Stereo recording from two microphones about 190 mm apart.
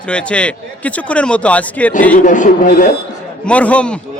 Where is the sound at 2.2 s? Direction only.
40° left (ahead or behind).